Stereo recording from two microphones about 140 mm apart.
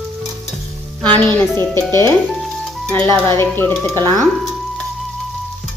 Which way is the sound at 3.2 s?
15° left (ahead or behind).